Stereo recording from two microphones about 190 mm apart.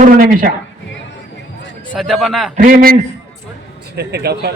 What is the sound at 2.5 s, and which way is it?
Speech, 45° right (ahead or behind).